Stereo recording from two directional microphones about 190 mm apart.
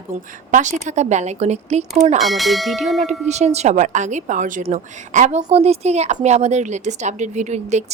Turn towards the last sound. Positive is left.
turn(degrees=-35)  # may be behind; listen again after turning